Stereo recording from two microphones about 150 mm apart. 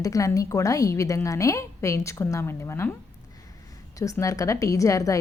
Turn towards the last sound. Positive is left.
turn(degrees=20)  # may be behind; listen again after turning